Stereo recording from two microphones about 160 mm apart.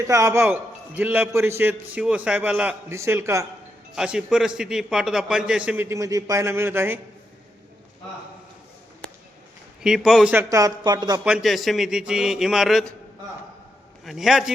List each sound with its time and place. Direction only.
0.0 s a man's voice: 20° right (ahead or behind)
3.9 s a man's voice: 5° right (ahead or behind)
9.8 s a man's voice: 5° right (ahead or behind)
10.5 s speech: 20° right (ahead or behind)
11.2 s a man's voice: 5° right (ahead or behind)
14.0 s a man's voice: centre (ahead or behind)